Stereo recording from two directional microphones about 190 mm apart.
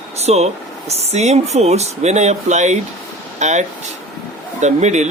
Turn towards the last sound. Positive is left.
turn(degrees=-40)  # may be behind; listen again after turning